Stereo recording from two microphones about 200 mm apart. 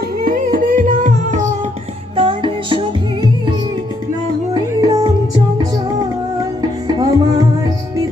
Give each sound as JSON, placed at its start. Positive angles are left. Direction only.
{"t": 0.3, "sound": "music", "side_deg": -45}
{"t": 2.1, "sound": "music", "side_deg": -25}
{"t": 4.5, "sound": "music", "side_deg": -20}
{"t": 6.6, "sound": "music", "side_deg": -20}